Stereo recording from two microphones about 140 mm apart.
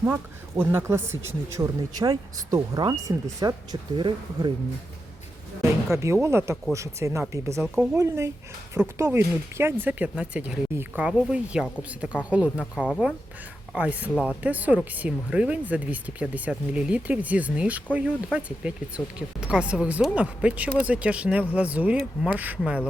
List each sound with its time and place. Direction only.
0.0 s speech: 15° right (ahead or behind); by 4.5 s 35° right (ahead or behind)
5.9 s speech: 20° right (ahead or behind)